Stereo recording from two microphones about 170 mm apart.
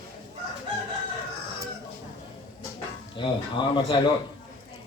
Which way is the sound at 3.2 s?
30° left (ahead or behind).